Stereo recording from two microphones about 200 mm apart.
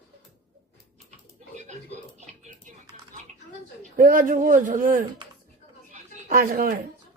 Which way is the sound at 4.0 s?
40° right (ahead or behind).